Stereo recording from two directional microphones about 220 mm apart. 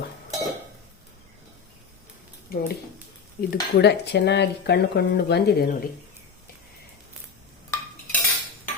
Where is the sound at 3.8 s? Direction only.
50° left (ahead or behind).